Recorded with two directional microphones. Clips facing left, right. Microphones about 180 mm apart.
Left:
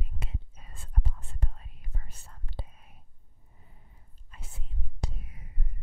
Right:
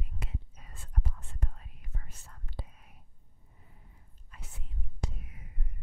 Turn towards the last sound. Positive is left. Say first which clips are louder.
# even
turn(degrees=35)  # may be behind; listen again after turning